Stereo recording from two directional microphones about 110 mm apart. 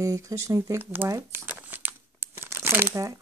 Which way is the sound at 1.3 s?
15° right (ahead or behind).